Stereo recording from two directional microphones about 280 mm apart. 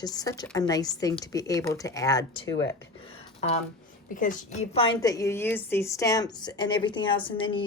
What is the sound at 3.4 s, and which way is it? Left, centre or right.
A woman's voice, left.